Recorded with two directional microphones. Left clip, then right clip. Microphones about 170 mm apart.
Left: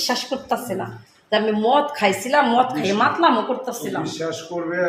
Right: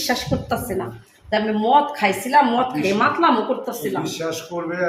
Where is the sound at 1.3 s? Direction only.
30° left (ahead or behind).